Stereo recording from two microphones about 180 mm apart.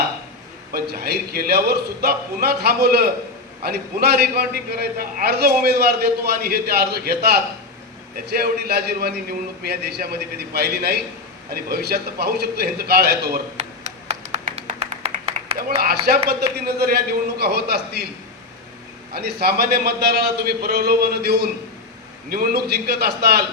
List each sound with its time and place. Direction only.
0.7 s a man's voice: 60° right (ahead or behind)
13.6 s a sound: 35° right (ahead or behind)
15.5 s a man's voice: 55° right (ahead or behind)
19.1 s a man's voice: 60° right (ahead or behind)